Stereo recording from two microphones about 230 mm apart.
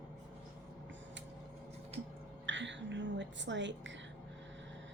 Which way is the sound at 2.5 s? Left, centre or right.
Right.